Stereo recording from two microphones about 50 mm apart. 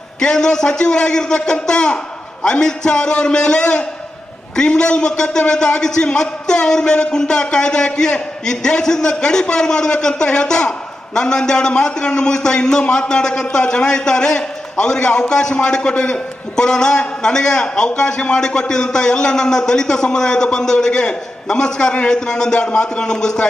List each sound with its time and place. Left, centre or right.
0.2 s a man's voice: centre